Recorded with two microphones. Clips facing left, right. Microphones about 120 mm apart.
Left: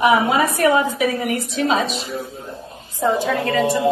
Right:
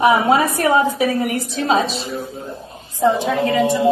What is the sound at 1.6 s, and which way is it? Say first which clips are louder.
Speech: right 2 dB; 35° right (ahead or behind).